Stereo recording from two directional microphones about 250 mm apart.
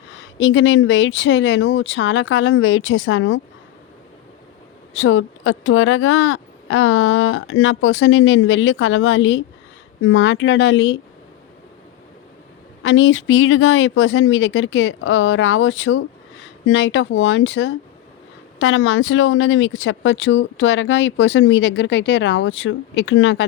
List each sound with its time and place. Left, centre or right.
0.2 s speech: left
4.9 s speech: left
12.8 s speech: left